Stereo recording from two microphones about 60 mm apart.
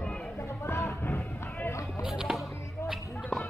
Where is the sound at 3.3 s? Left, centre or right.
Centre.